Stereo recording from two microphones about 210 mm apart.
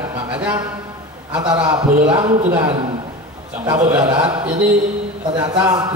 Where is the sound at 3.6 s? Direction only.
15° right (ahead or behind).